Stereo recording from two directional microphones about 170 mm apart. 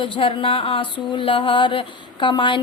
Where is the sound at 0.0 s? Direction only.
30° left (ahead or behind).